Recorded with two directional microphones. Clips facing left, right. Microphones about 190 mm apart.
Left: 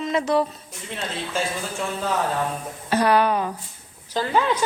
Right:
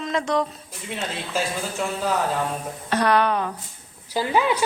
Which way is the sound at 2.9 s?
5° left (ahead or behind).